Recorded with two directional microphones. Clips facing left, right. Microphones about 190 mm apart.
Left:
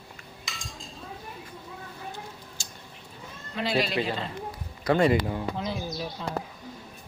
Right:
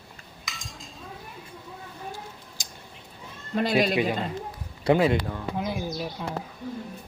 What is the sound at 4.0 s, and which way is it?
Speech, 15° right (ahead or behind).